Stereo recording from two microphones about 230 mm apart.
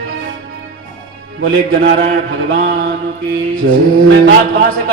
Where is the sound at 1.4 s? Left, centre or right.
Right.